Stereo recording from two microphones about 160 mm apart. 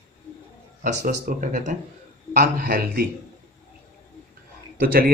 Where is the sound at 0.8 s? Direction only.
50° right (ahead or behind); by 3.0 s 70° right (ahead or behind).